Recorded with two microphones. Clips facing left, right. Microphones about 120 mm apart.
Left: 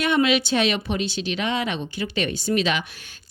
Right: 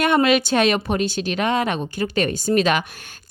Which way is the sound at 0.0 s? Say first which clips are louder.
Right 3 dB; 50° right (ahead or behind).